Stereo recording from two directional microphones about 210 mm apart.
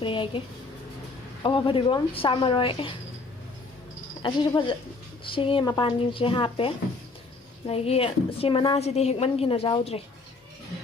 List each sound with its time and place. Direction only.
0.0 s a woman's voice: 25° left (ahead or behind)
4.2 s a woman's voice: 20° left (ahead or behind)